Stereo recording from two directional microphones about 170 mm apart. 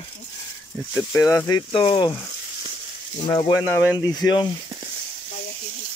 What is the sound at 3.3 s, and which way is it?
Speech, 30° left (ahead or behind).